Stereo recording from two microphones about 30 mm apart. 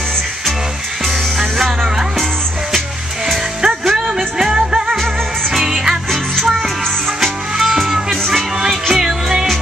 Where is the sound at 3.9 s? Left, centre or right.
Centre.